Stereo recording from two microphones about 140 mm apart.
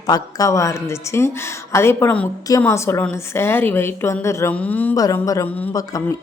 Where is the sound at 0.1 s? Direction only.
25° left (ahead or behind).